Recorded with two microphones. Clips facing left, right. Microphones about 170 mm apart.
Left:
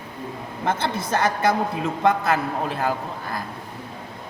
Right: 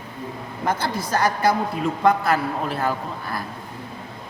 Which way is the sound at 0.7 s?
25° left (ahead or behind).